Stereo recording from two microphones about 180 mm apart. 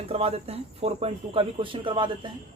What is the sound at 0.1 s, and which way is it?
Speech, 35° right (ahead or behind).